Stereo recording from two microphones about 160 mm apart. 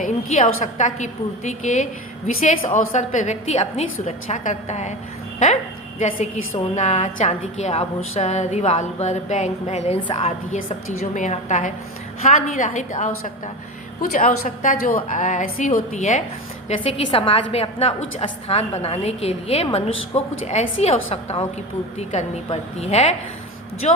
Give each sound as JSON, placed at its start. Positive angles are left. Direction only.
{"t": 0.0, "sound": "a woman's voice", "side_deg": 45}
{"t": 6.0, "sound": "a woman's voice", "side_deg": 45}
{"t": 10.0, "sound": "a woman's voice", "side_deg": 35}
{"t": 11.1, "sound": "a woman's voice", "side_deg": 50}
{"t": 14.4, "sound": "a woman's voice", "side_deg": 55}
{"t": 16.6, "sound": "a woman's voice", "side_deg": 35}
{"t": 22.4, "sound": "a woman's voice", "side_deg": 40}